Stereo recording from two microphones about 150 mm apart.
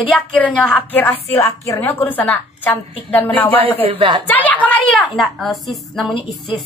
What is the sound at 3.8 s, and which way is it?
Speech, 35° right (ahead or behind).